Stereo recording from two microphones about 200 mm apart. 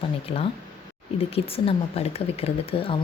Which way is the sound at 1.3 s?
30° left (ahead or behind).